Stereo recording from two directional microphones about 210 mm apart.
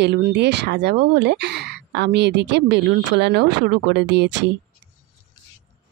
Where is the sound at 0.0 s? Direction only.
55° right (ahead or behind).